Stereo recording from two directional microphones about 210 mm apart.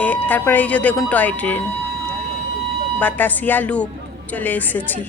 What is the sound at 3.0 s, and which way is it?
Speech, 10° left (ahead or behind).